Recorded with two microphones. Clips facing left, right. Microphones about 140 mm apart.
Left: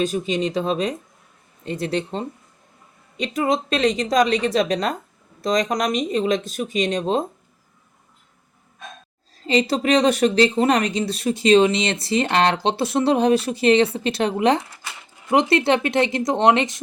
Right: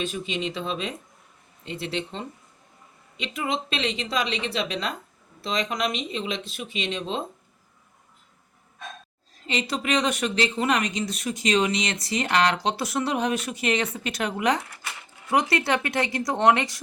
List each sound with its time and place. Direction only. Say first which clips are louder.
0.0 s speech: left 7 dB; 40° left (ahead or behind)
9.4 s speech: left 9 dB; 35° left (ahead or behind)